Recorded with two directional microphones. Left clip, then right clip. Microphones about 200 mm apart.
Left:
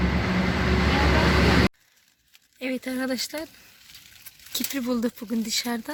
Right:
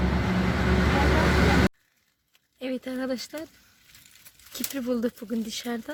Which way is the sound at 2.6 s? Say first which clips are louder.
Left 2 dB; centre (ahead or behind).